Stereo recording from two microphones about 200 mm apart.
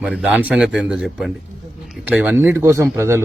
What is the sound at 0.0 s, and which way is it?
A man's voice, 5° right (ahead or behind).